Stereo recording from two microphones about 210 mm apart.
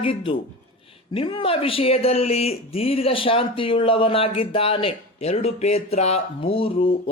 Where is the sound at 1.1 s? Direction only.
25° left (ahead or behind).